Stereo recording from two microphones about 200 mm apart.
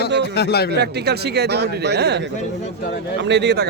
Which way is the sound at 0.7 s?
55° right (ahead or behind).